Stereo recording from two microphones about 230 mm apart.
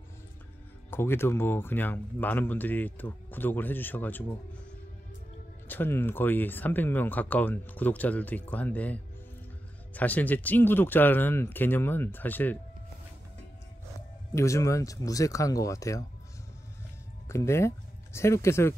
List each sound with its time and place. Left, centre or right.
0.8 s speech: centre
5.7 s speech: centre
14.3 s speech: centre
17.3 s speech: centre